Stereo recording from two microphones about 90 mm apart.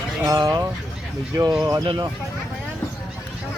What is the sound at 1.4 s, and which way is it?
Speech, 35° right (ahead or behind).